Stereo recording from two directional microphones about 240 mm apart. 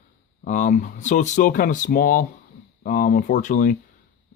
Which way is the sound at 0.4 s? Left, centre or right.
Left.